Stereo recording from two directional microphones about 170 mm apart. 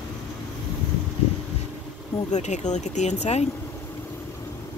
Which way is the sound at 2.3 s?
45° left (ahead or behind).